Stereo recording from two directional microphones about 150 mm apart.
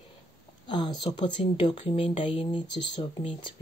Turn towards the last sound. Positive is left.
turn(degrees=35)  # may be behind; listen again after turning